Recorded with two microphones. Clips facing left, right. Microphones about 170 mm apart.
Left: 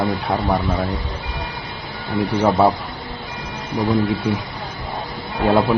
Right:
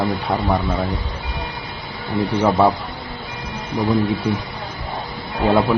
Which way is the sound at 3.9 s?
10° left (ahead or behind).